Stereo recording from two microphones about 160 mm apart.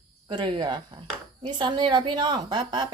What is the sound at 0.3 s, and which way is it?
A woman's voice, 30° right (ahead or behind).